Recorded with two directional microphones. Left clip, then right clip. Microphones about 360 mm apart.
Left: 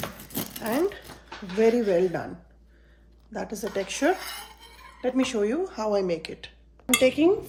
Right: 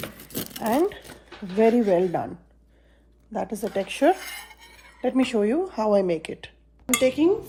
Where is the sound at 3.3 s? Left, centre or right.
Centre.